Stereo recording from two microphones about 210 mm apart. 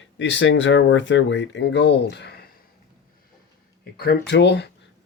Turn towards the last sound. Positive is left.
turn(degrees=55)  # may be behind; listen again after turning